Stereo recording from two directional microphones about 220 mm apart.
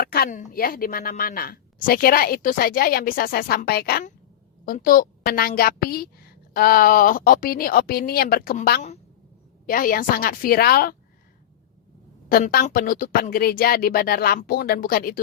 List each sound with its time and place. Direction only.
0.0 s speech: 45° left (ahead or behind)
12.3 s speech: 45° left (ahead or behind)